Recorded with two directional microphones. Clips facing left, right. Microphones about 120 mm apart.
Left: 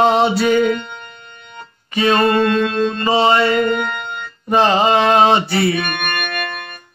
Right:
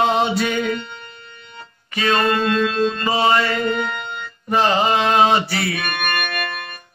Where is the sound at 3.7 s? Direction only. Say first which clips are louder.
Left 2 dB; 55° left (ahead or behind).